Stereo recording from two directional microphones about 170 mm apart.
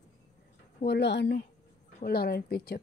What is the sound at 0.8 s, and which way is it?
Speech, 80° left.